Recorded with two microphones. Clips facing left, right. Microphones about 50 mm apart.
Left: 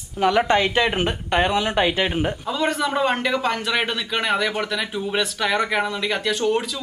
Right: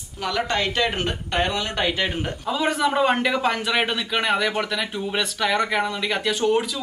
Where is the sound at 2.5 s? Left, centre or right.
Centre.